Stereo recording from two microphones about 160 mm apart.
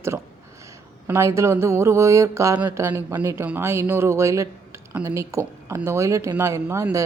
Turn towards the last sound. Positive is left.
turn(degrees=-15)  # may be behind; listen again after turning